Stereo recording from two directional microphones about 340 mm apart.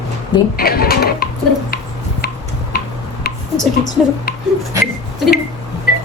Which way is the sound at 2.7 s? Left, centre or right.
Left.